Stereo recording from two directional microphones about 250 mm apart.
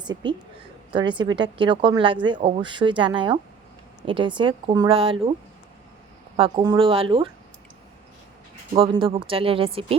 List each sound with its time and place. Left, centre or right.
0.1 s a woman's voice: centre
6.3 s a woman's voice: centre
8.7 s a woman's voice: right